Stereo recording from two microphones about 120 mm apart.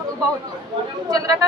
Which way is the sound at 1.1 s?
30° right (ahead or behind).